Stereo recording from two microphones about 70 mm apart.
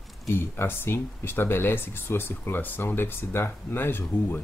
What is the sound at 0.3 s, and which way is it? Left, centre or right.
Speech, left.